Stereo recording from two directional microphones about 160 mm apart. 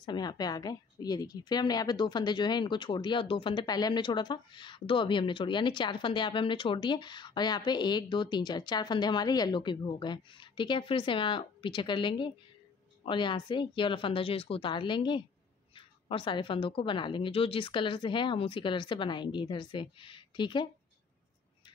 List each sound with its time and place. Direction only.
0.0 s a woman's voice: 25° left (ahead or behind)